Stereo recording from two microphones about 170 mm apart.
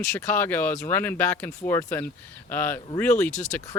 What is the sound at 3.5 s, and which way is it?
Speech, 15° left (ahead or behind).